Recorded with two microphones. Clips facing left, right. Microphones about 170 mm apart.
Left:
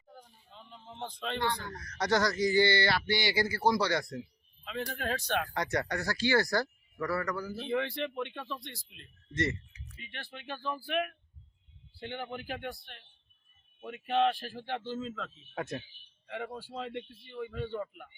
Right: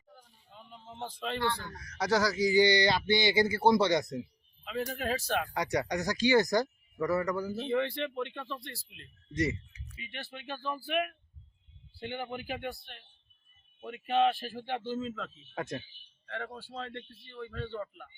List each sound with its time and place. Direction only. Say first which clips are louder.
0.5 s a sound: right 1 dB; 5° right (ahead or behind)
1.5 s speech: even; 10° right (ahead or behind)
4.9 s speech: even; 5° right (ahead or behind); by 7.5 s 20° right (ahead or behind)
7.5 s speech: right 2 dB; centre (ahead or behind)